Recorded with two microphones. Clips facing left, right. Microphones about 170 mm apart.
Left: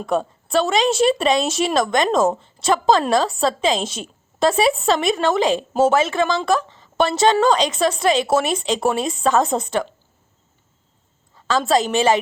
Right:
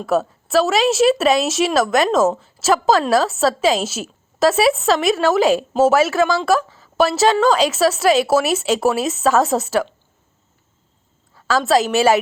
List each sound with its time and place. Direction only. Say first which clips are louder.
0.0 s a woman's voice: right 3 dB; 5° right (ahead or behind)
11.4 s a woman's voice: right 2 dB; 5° right (ahead or behind)